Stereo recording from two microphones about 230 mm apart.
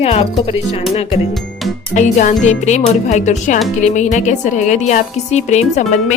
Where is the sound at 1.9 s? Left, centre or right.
Left.